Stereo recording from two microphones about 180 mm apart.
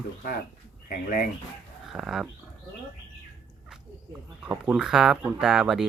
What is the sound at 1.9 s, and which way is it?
Speech, centre (ahead or behind).